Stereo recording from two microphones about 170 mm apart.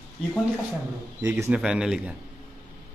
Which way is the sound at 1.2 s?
15° right (ahead or behind).